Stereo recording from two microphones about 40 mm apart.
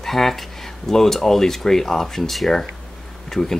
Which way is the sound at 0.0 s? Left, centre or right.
Centre.